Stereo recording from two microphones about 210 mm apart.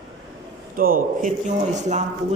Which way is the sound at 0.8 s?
40° right (ahead or behind).